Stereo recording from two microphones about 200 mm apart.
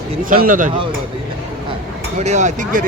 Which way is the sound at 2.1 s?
35° right (ahead or behind).